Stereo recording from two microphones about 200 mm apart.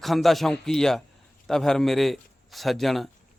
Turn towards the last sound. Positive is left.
turn(degrees=0)  # may be behind; listen again after turning